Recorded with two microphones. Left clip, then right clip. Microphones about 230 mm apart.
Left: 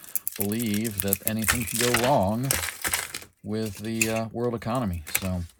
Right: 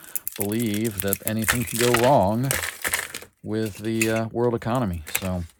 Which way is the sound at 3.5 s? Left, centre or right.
Right.